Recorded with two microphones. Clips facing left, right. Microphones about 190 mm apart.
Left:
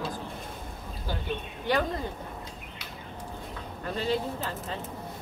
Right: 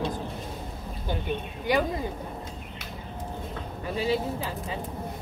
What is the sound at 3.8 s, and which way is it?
Speech, 10° right (ahead or behind).